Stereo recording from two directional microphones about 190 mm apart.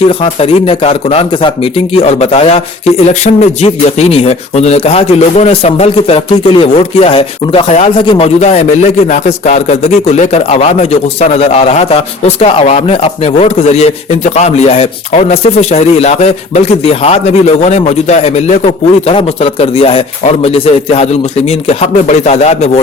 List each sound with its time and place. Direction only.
0.2 s a man's voice: 30° left (ahead or behind)